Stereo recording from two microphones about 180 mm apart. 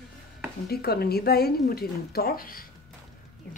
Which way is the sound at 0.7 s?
60° left (ahead or behind).